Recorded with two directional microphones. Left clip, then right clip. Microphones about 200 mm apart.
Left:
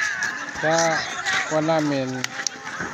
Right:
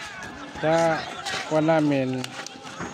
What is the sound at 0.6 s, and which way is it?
Speech, 15° right (ahead or behind).